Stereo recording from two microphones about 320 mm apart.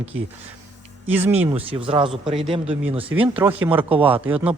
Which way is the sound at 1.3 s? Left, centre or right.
Centre.